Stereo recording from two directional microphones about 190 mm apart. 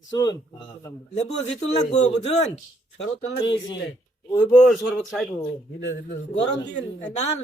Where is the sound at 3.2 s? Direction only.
25° left (ahead or behind).